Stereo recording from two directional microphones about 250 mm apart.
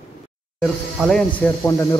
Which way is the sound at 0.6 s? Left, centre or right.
Centre.